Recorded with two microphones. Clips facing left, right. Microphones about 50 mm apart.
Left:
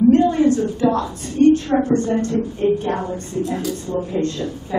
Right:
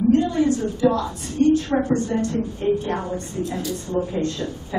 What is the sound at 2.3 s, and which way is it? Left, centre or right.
Speech, left.